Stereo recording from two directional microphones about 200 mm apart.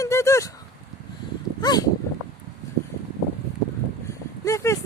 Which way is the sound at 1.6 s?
20° left (ahead or behind).